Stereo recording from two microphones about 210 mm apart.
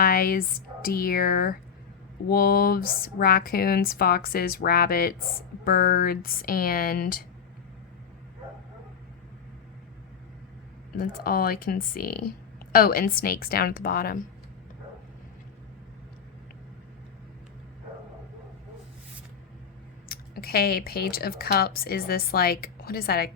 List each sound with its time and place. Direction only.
0.0 s speech: 45° left (ahead or behind)
10.9 s speech: 45° left (ahead or behind)
20.1 s speech: 45° left (ahead or behind)